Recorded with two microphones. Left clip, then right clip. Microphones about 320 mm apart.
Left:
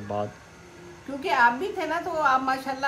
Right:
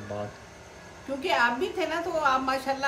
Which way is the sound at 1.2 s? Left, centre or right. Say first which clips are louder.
Left 3 dB; centre.